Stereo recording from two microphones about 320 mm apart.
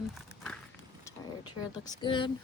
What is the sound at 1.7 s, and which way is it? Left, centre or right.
Speech, centre.